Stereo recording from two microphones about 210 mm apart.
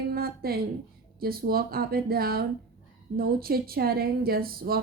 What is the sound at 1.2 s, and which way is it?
Speech, 45° right (ahead or behind).